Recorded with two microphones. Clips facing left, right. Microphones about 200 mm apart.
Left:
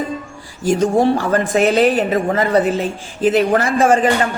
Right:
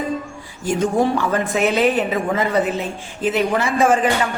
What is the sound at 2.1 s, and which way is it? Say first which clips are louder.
A man's voice: left 4 dB; 50° left (ahead or behind).